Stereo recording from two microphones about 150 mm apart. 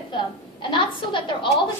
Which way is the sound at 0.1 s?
35° left (ahead or behind).